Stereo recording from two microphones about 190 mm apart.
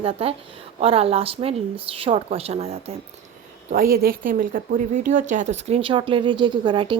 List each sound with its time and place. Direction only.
0.0 s speech: 30° right (ahead or behind)
3.9 s speech: 50° right (ahead or behind); by 6.9 s 25° right (ahead or behind)